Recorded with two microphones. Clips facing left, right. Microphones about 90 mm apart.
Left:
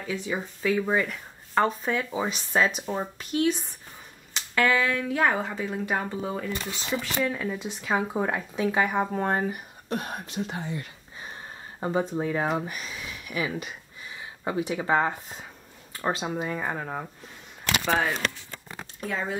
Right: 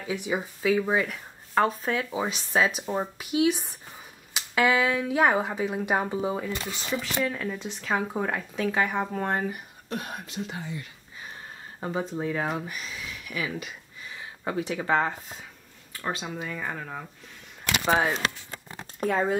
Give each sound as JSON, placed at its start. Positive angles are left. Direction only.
{"t": 0.0, "sound": "speech", "side_deg": -15}
{"t": 6.5, "sound": "speech", "side_deg": 15}
{"t": 9.8, "sound": "speech", "side_deg": 40}
{"t": 11.8, "sound": "speech", "side_deg": 20}
{"t": 14.4, "sound": "speech", "side_deg": 10}
{"t": 15.9, "sound": "speech", "side_deg": 30}
{"t": 17.8, "sound": "speech", "side_deg": -15}
{"t": 18.9, "sound": "speech", "side_deg": -45}